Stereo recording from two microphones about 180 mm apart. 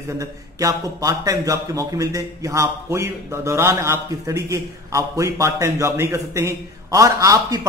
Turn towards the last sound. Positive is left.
turn(degrees=-20)  # may be behind; listen again after turning